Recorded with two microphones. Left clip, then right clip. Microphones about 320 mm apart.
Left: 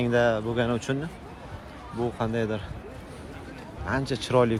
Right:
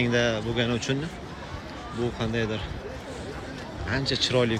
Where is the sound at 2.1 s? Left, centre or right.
Centre.